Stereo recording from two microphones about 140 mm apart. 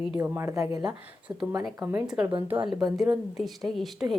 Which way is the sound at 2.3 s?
40° right (ahead or behind).